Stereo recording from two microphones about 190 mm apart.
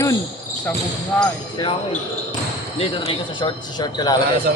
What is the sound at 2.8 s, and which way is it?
Speech, 30° left (ahead or behind).